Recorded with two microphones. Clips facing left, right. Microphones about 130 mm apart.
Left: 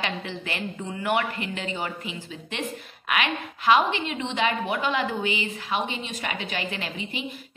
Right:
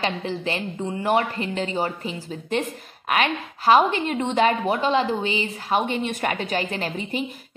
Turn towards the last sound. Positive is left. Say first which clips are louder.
# right 6 dB
turn(degrees=-45)  # may be behind; listen again after turning